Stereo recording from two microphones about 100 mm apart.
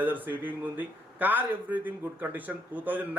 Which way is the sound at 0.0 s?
20° right (ahead or behind).